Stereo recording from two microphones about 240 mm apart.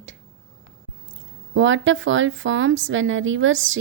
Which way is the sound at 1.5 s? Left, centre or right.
Right.